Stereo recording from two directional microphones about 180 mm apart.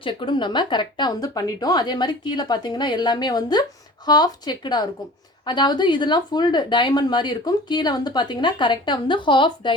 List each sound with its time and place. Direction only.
0.0 s a woman's voice: 30° left (ahead or behind)